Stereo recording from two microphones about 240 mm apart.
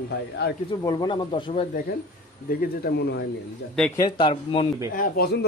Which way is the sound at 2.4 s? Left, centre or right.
Left.